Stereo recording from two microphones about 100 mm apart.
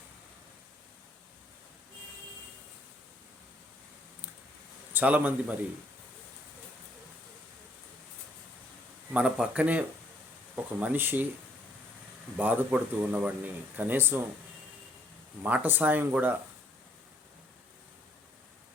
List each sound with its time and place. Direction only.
4.9 s speech: 15° right (ahead or behind)
9.1 s speech: 10° right (ahead or behind)
12.4 s speech: 15° right (ahead or behind)
15.4 s speech: 15° right (ahead or behind)